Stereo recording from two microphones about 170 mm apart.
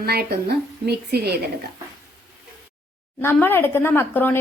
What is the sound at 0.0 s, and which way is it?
A woman's voice, 70° right (ahead or behind).